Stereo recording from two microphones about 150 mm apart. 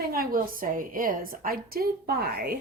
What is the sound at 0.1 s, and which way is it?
A woman's voice, 75° right (ahead or behind).